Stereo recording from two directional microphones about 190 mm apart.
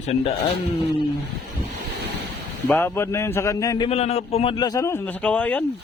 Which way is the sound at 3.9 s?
35° left (ahead or behind).